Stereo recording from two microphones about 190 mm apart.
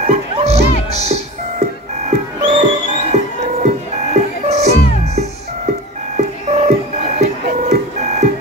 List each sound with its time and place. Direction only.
0.0 s music: 35° right (ahead or behind)